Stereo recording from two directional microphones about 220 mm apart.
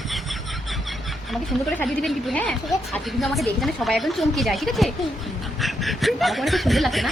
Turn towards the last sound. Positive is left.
turn(degrees=0)  # may be behind; listen again after turning